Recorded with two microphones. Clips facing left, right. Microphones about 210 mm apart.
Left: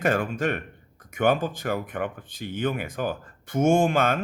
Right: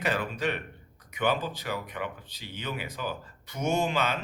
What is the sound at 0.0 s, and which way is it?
Speech, 50° left (ahead or behind).